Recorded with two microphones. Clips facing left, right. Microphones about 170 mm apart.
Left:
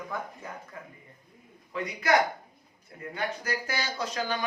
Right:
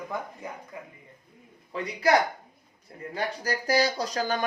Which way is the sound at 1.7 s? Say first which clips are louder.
Right 2 dB; 30° right (ahead or behind).